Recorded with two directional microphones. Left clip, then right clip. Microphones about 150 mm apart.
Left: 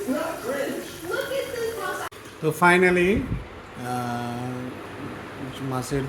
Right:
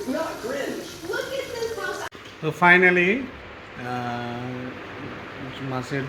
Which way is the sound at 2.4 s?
20° left (ahead or behind).